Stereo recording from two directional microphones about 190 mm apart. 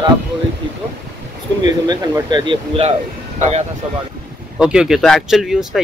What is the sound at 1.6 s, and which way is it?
Speech, 20° right (ahead or behind).